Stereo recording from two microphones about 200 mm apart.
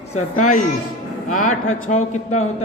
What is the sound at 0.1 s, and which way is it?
Speech, 40° left (ahead or behind).